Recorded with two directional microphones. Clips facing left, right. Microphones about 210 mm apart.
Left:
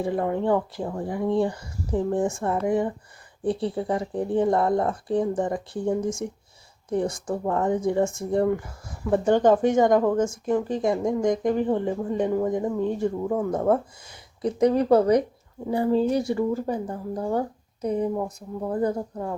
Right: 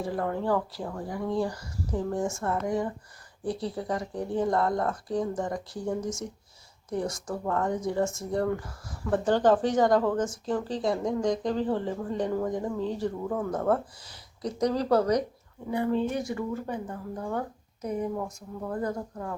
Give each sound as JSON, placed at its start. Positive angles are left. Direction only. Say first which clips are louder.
{"t": 0.0, "sound": "speech", "louder": "left 5 dB", "side_deg": 20}
{"t": 6.9, "sound": "speech", "louder": "left 5 dB", "side_deg": 30}
{"t": 8.4, "sound": "speech", "louder": "left 5 dB", "side_deg": 15}
{"t": 15.7, "sound": "speech", "louder": "left 5 dB", "side_deg": 35}